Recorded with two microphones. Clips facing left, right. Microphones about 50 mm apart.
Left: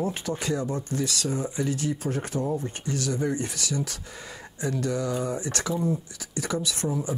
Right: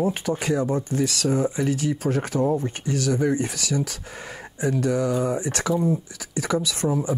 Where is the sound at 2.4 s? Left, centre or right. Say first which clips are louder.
Right 6 dB; right.